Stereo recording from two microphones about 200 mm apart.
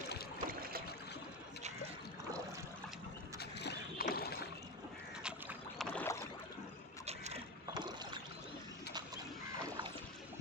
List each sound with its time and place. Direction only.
0.3 s boat: 45° right (ahead or behind)
3.6 s boat: 50° left (ahead or behind)
5.2 s boat: 5° right (ahead or behind)
5.9 s boat: 10° left (ahead or behind)
7.0 s boat: 30° right (ahead or behind)
8.9 s a sound: 20° right (ahead or behind)